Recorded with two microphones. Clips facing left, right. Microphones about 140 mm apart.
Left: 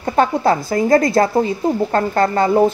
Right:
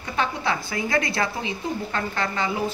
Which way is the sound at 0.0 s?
45° left (ahead or behind).